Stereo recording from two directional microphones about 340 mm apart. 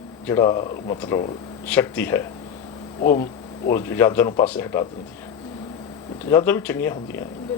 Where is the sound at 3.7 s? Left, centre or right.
Centre.